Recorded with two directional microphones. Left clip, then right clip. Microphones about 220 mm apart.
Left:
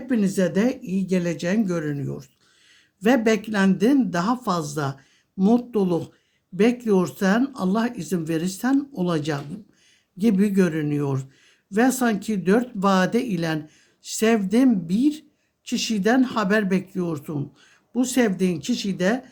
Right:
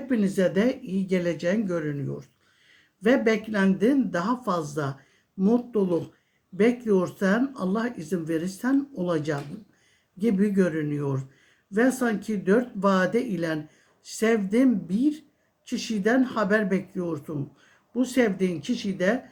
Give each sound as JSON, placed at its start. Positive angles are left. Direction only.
{"t": 0.1, "sound": "speech", "side_deg": 40}